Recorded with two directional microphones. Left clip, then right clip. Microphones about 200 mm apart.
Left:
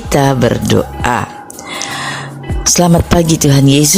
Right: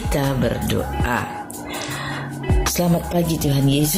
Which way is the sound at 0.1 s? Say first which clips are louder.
Left 11 dB; 45° left (ahead or behind).